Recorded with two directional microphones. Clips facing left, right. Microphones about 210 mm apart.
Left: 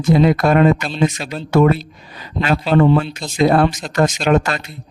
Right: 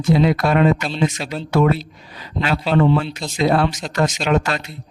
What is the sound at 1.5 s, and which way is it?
Speech, 50° left (ahead or behind).